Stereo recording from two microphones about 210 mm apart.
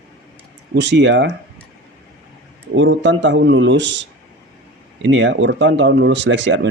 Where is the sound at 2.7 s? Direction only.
60° right (ahead or behind).